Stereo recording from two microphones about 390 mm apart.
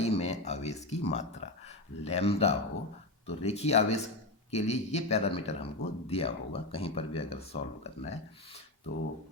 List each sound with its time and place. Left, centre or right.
0.0 s speech: centre